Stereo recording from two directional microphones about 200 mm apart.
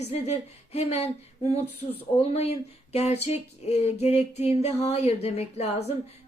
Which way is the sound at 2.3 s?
30° left (ahead or behind).